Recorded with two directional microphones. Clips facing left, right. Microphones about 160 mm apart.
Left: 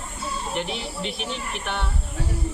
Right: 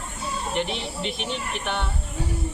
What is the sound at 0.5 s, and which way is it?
Speech, 5° left (ahead or behind).